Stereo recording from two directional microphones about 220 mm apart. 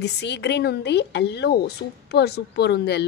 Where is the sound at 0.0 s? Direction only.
50° left (ahead or behind).